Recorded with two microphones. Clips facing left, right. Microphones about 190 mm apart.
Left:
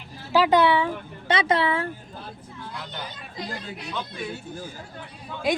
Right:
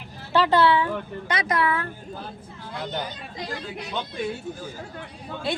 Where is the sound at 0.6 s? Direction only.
20° left (ahead or behind).